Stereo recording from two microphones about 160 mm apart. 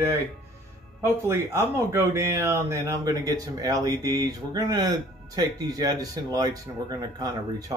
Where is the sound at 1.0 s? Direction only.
15° right (ahead or behind).